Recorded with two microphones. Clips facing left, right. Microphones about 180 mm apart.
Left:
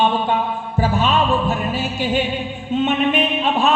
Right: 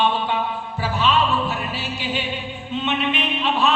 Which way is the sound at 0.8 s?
50° left (ahead or behind).